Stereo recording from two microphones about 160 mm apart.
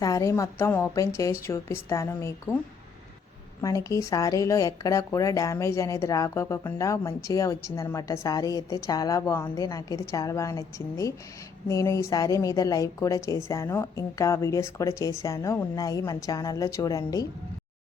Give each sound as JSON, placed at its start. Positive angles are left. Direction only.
{"t": 0.0, "sound": "speech", "side_deg": 20}
{"t": 3.6, "sound": "speech", "side_deg": 20}